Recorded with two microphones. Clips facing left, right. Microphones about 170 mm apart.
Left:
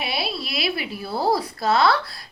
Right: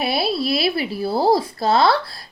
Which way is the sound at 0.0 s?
40° right (ahead or behind).